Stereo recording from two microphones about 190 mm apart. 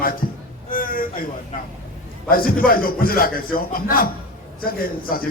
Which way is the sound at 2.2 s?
50° left (ahead or behind).